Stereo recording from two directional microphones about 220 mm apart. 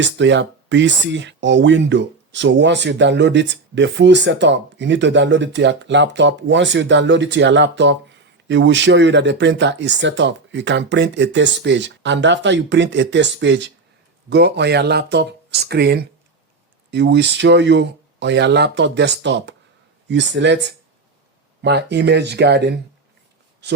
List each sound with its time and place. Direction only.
0.0 s speech: 55° right (ahead or behind)